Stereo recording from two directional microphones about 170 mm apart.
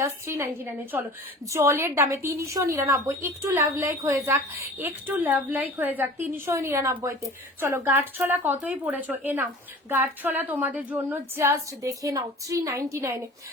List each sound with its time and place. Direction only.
0.0 s a woman's voice: 15° right (ahead or behind)